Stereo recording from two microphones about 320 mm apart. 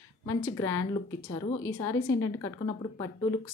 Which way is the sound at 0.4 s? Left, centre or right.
Centre.